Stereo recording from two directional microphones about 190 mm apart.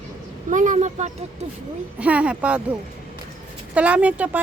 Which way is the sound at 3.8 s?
5° right (ahead or behind).